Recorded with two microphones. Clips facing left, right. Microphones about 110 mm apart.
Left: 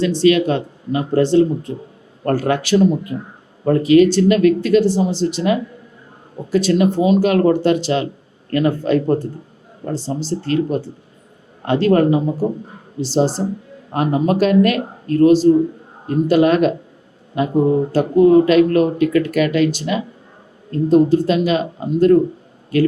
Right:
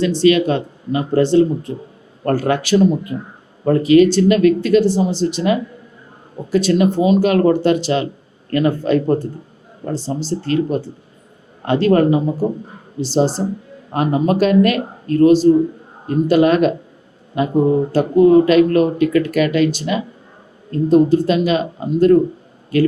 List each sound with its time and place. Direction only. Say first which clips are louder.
0.0 s speech: right 1 dB; 20° right (ahead or behind)